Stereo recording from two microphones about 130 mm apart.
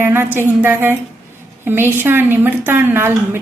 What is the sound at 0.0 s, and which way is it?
A woman's voice, 15° right (ahead or behind).